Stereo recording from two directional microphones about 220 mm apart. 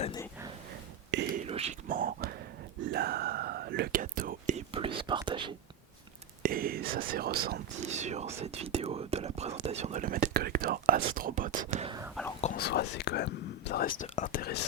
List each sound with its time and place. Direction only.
1.3 s whispering: 25° right (ahead or behind)
1.9 s whispering: 40° right (ahead or behind); by 5.5 s 20° right (ahead or behind)
6.4 s whispering: 40° right (ahead or behind)
7.8 s whispering: 30° right (ahead or behind)
12.5 s whispering: 45° left (ahead or behind)